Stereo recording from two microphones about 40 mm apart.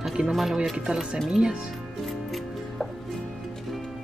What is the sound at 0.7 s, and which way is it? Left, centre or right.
Speech, right.